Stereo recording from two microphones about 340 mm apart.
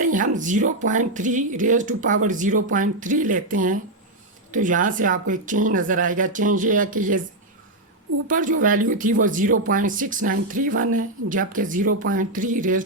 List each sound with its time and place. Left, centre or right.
0.0 s speech: right
8.3 s speech: right